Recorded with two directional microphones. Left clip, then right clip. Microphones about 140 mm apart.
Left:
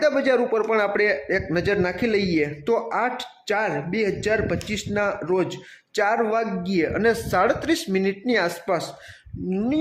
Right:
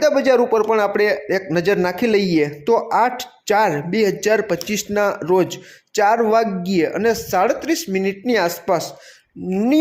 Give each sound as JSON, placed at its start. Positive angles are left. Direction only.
{"t": 0.0, "sound": "a man's voice", "side_deg": -15}
{"t": 5.9, "sound": "speech", "side_deg": -15}
{"t": 8.3, "sound": "speech", "side_deg": -15}